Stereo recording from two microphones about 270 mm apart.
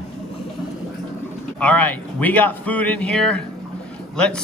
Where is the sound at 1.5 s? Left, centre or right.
Centre.